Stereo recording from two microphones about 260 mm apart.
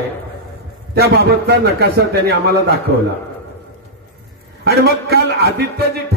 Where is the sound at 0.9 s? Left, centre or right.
Right.